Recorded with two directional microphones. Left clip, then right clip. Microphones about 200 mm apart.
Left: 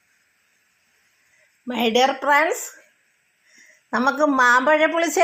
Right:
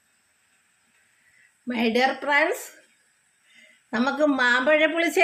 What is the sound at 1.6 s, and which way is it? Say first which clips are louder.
Speech: left 4 dB; 5° left (ahead or behind).